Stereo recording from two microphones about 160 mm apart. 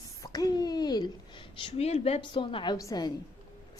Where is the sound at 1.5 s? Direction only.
40° left (ahead or behind).